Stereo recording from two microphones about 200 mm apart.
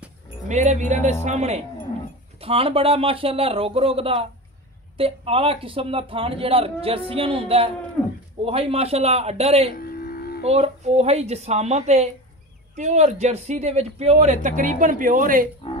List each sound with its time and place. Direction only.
0.5 s a man's voice: 35° right (ahead or behind)
9.8 s a sound: 50° left (ahead or behind)
10.4 s speech: 30° right (ahead or behind)